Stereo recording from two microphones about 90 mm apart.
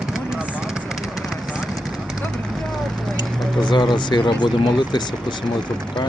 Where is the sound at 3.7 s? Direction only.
60° left (ahead or behind).